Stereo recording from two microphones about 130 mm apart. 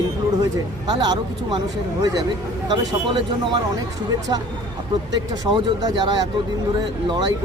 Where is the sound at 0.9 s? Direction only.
30° right (ahead or behind).